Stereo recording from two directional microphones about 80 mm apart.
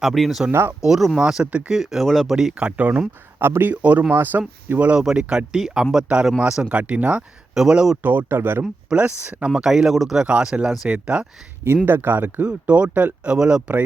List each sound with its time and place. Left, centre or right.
0.0 s speech: centre
3.4 s speech: right; by 7.9 s centre
8.0 s speech: right
8.6 s speech: centre
9.5 s speech: centre
10.2 s speech: centre
11.9 s speech: right